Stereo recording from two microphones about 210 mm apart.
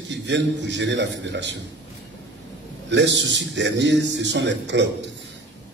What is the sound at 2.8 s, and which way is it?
A man's voice, 55° right (ahead or behind).